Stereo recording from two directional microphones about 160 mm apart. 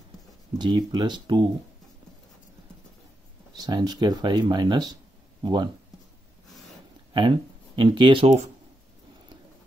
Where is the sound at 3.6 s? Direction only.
25° right (ahead or behind).